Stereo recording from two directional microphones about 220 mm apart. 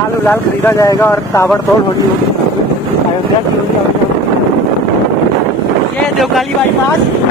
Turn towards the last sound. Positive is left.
turn(degrees=0)  # may be behind; listen again after turning